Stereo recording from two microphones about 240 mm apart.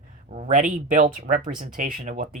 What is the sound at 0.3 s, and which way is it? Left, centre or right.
Speech, right.